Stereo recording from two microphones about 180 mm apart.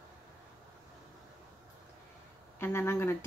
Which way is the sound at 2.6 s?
15° left (ahead or behind).